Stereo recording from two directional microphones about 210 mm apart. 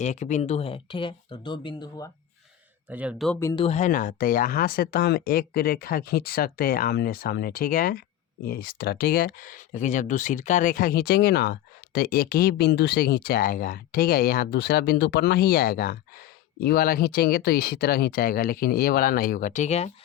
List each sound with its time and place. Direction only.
0.0 s speech: 35° left (ahead or behind)
2.9 s speech: 5° right (ahead or behind)
3.4 s speech: 25° left (ahead or behind)